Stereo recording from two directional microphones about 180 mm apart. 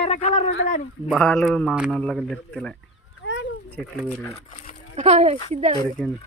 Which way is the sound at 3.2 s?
80° left.